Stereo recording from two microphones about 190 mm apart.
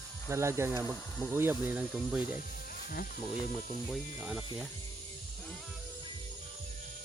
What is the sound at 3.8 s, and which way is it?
Speech, 5° right (ahead or behind).